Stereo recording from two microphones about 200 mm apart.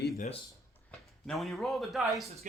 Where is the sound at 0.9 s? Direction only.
Centre (ahead or behind).